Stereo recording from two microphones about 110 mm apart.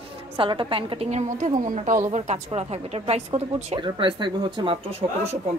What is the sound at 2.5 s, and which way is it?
Speech, 70° right (ahead or behind).